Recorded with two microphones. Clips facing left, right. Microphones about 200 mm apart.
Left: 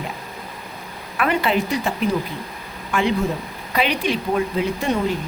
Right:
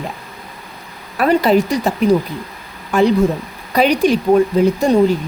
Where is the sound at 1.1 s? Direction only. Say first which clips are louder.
Right 7 dB; 40° right (ahead or behind).